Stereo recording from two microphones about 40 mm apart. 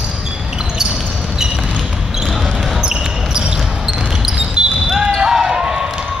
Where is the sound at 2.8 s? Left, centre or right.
Centre.